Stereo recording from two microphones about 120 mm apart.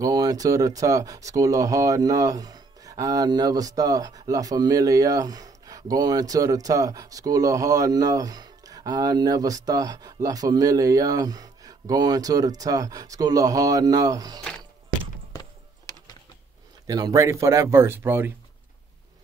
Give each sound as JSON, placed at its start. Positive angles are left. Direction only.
{"t": 0.0, "sound": "speech", "side_deg": -30}
{"t": 16.8, "sound": "speech", "side_deg": -30}